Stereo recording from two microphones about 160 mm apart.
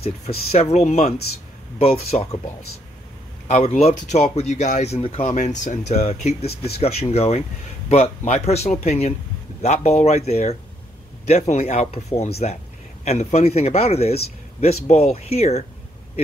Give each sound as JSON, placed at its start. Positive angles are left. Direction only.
{"t": 0.0, "sound": "speech", "side_deg": 40}
{"t": 3.4, "sound": "speech", "side_deg": 45}